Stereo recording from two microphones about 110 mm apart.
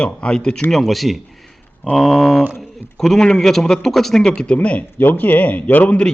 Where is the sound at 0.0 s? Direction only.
10° left (ahead or behind).